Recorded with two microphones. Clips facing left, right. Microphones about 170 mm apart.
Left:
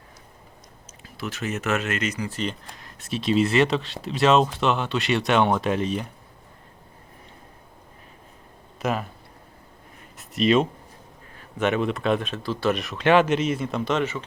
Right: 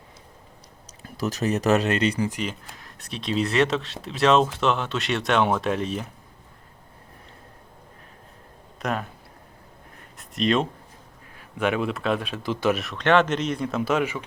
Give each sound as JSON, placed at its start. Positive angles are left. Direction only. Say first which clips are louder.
{"t": 1.0, "sound": "speech", "louder": "right 5 dB", "side_deg": -40}
{"t": 2.3, "sound": "speech", "louder": "left 1 dB", "side_deg": -5}
{"t": 8.8, "sound": "speech", "louder": "left 2 dB", "side_deg": 0}
{"t": 10.2, "sound": "speech", "louder": "left 3 dB", "side_deg": 0}
{"t": 12.4, "sound": "speech", "louder": "right 1 dB", "side_deg": -20}
{"t": 12.7, "sound": "speech", "louder": "left 2 dB", "side_deg": 0}